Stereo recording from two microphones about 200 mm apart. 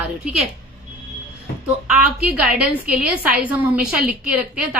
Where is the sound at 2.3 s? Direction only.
5° right (ahead or behind).